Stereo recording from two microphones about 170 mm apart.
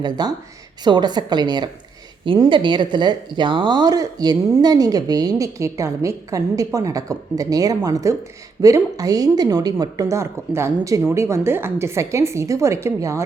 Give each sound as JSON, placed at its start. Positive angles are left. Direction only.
{"t": 0.0, "sound": "a woman's voice", "side_deg": -25}